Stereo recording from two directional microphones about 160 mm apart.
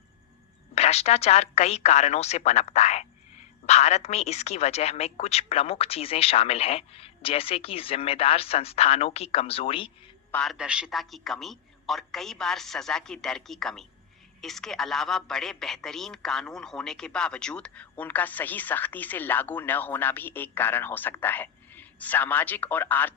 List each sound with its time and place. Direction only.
0.8 s speech: 40° left (ahead or behind)
10.3 s a man's voice: centre (ahead or behind)